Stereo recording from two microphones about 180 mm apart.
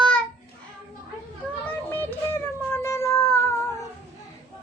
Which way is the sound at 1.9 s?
10° left (ahead or behind).